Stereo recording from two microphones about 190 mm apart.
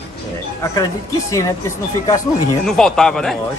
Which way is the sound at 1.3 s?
15° left (ahead or behind).